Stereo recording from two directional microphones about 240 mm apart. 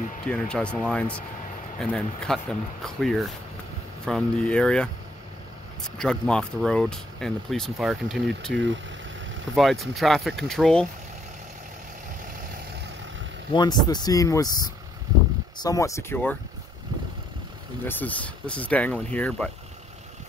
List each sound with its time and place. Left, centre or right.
0.3 s speech: centre
5.9 s speech: centre
8.5 s speech: right
9.6 s speech: centre
13.5 s speech: centre
17.8 s speech: centre